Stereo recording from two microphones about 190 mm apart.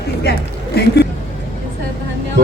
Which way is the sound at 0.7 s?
60° left (ahead or behind).